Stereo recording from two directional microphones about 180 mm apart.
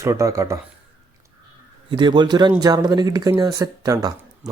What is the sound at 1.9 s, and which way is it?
Speech, 25° right (ahead or behind).